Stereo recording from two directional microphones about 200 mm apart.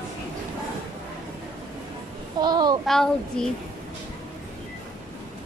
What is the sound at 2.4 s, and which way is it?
Child singing, 20° right (ahead or behind).